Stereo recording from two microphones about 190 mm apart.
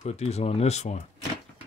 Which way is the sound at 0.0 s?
35° left (ahead or behind).